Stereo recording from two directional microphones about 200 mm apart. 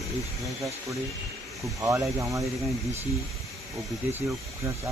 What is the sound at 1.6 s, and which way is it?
Speech, 15° right (ahead or behind).